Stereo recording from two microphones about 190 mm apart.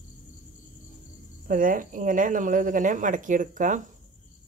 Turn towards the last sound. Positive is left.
turn(degrees=-45)  # may be behind; listen again after turning